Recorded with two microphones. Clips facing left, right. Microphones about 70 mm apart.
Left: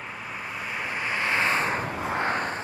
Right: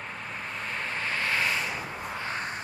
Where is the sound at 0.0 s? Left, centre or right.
Centre.